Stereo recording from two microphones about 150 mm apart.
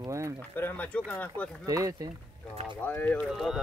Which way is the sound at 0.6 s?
10° left (ahead or behind).